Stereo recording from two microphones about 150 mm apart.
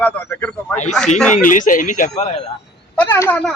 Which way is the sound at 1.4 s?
60° left (ahead or behind).